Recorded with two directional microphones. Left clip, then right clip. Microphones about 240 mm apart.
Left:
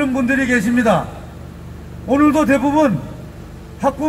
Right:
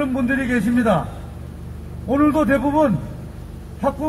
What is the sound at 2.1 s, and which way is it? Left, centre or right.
A man's voice, left.